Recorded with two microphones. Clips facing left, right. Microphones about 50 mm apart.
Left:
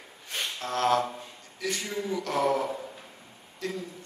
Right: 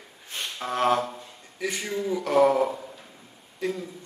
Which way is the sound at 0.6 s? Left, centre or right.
Centre.